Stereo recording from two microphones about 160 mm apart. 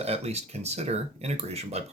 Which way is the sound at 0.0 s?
40° right (ahead or behind).